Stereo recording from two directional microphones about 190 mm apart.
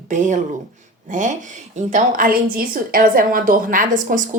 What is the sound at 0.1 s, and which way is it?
A woman's voice, 40° right (ahead or behind).